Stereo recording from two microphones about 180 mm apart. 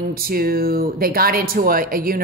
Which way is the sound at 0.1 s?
55° right (ahead or behind).